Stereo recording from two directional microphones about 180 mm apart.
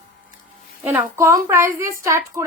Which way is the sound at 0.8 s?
10° right (ahead or behind).